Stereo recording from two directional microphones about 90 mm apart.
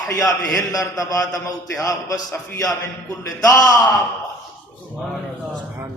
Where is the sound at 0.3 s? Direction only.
40° left (ahead or behind).